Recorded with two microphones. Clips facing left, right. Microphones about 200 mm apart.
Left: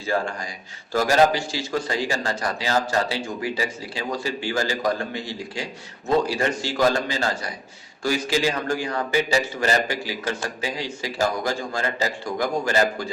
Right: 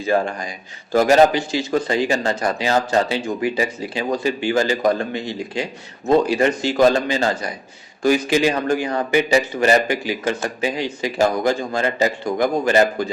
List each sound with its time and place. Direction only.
0.0 s a man's voice: 20° right (ahead or behind)